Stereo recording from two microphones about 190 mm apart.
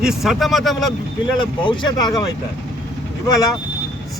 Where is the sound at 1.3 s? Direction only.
25° left (ahead or behind).